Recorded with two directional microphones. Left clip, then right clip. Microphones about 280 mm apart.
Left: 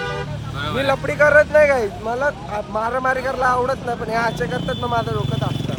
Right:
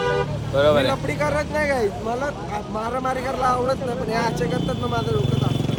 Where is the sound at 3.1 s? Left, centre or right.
Left.